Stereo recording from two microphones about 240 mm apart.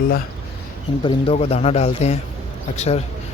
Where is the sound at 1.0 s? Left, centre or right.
Left.